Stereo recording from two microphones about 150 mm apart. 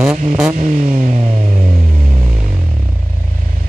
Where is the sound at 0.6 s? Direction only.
50° right (ahead or behind).